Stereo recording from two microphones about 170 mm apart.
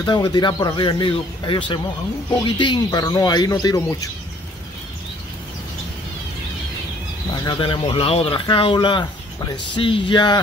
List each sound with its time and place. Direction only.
0.0 s speech: 25° left (ahead or behind)
7.4 s speech: 30° left (ahead or behind)